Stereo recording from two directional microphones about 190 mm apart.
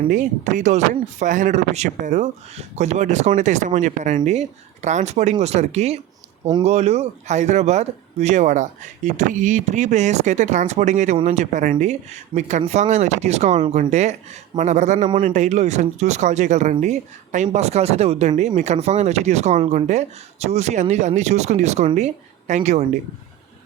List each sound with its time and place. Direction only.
0.1 s speech: 40° right (ahead or behind)